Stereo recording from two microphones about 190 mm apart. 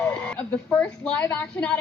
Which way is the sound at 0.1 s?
5° left (ahead or behind).